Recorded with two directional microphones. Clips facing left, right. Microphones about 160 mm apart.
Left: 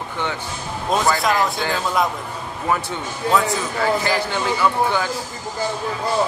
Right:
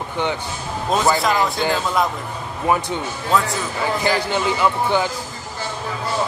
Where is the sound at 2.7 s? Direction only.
15° right (ahead or behind).